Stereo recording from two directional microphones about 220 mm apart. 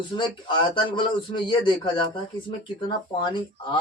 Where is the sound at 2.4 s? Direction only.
20° left (ahead or behind).